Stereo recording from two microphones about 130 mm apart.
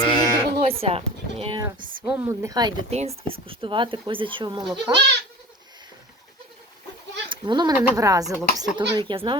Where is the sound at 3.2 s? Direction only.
45° right (ahead or behind).